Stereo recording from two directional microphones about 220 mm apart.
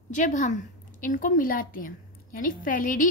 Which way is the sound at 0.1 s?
35° left (ahead or behind).